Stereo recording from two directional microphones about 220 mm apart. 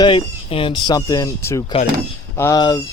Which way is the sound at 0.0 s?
25° left (ahead or behind).